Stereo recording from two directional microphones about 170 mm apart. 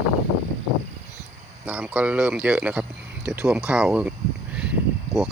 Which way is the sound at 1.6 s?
10° right (ahead or behind).